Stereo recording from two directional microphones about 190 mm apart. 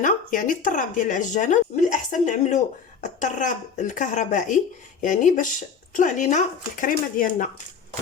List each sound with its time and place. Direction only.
0.0 s speech: 45° left (ahead or behind)